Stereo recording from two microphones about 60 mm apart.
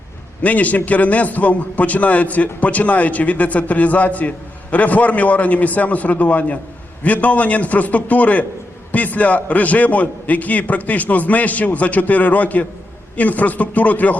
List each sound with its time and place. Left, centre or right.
0.4 s a man's voice: left